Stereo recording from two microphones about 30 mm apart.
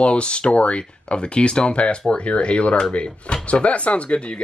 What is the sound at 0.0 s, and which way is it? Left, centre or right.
Speech, left.